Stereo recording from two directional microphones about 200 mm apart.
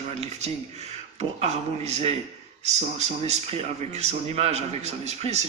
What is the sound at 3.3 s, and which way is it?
A man's voice, 30° right (ahead or behind).